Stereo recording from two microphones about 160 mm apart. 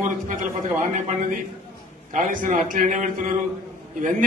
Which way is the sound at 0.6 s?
55° right (ahead or behind).